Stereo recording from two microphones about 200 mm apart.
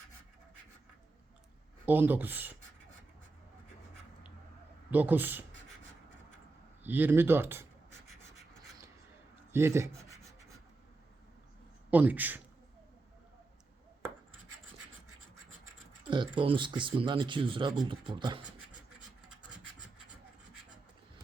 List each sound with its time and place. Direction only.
1.9 s speech: 10° right (ahead or behind)
4.9 s speech: 10° right (ahead or behind)
6.8 s speech: 10° right (ahead or behind)
9.5 s speech: 15° right (ahead or behind)
11.9 s speech: 10° right (ahead or behind)
16.0 s speech: 25° right (ahead or behind)